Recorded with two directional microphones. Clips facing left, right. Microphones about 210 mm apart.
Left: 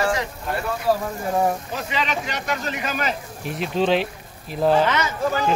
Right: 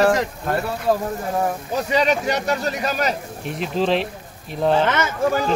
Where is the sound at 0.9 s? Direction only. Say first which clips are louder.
Right 1 dB; 20° right (ahead or behind).